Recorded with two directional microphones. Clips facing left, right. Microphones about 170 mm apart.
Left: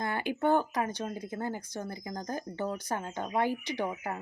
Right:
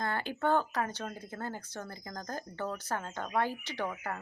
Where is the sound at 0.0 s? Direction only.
15° left (ahead or behind).